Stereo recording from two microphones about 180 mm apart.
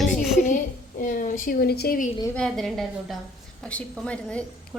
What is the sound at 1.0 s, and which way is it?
A woman's voice, 50° left (ahead or behind).